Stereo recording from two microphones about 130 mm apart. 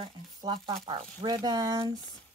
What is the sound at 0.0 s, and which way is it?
Speech, 35° right (ahead or behind).